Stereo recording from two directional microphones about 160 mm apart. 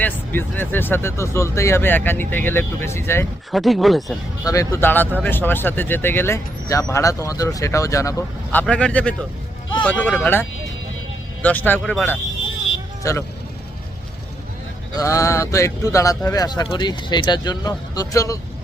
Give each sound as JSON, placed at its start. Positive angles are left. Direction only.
{"t": 0.0, "sound": "speech", "side_deg": 10}
{"t": 3.5, "sound": "speech", "side_deg": 0}
{"t": 4.4, "sound": "speech", "side_deg": 20}
{"t": 8.6, "sound": "speech", "side_deg": 5}
{"t": 11.4, "sound": "speech", "side_deg": 10}
{"t": 13.0, "sound": "speech", "side_deg": 20}
{"t": 14.9, "sound": "speech", "side_deg": 20}